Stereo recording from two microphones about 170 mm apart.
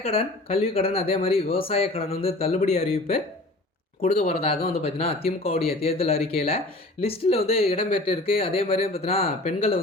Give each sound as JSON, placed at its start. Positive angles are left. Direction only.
{"t": 0.0, "sound": "speech", "side_deg": 35}
{"t": 4.0, "sound": "speech", "side_deg": 40}